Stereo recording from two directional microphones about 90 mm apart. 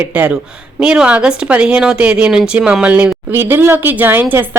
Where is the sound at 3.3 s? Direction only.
25° right (ahead or behind).